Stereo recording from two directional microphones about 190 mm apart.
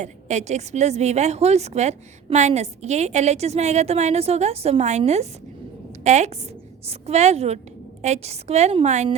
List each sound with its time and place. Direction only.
0.0 s a woman's voice: 40° right (ahead or behind)